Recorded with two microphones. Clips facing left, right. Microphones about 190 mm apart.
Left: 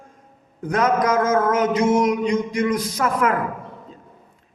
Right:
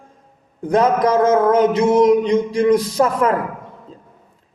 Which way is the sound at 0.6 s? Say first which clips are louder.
Right 4 dB; 30° right (ahead or behind).